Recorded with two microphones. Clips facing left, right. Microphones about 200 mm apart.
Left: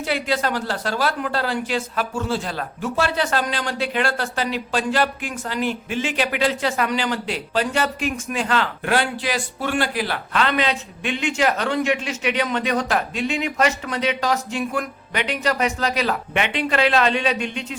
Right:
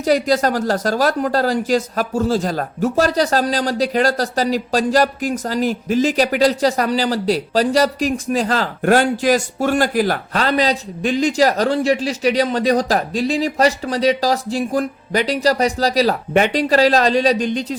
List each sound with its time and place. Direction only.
0.0 s a woman's voice: 40° right (ahead or behind)